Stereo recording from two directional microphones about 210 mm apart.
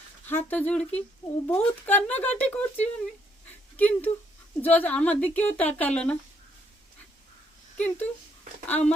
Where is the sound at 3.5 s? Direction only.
10° left (ahead or behind).